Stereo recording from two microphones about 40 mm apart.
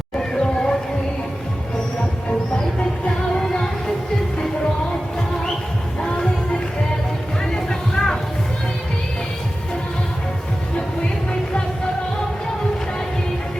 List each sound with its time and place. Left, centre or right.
0.2 s a sound: centre
3.3 s music: centre
7.5 s music: centre